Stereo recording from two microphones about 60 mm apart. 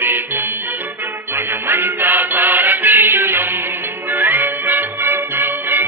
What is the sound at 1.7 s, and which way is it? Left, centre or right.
Music, right.